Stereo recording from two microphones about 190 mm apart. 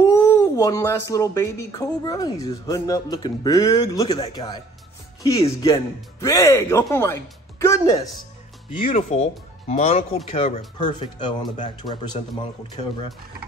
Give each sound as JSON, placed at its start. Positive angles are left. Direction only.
{"t": 0.0, "sound": "speech", "side_deg": 15}
{"t": 8.8, "sound": "speech", "side_deg": 35}
{"t": 10.8, "sound": "speech", "side_deg": 20}